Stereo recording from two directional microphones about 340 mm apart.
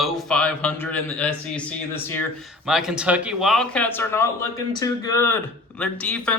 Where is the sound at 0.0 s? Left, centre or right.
Centre.